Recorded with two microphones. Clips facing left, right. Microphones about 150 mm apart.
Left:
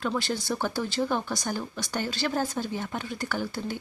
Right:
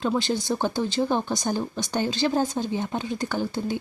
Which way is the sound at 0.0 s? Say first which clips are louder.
Right 4 dB; 20° right (ahead or behind).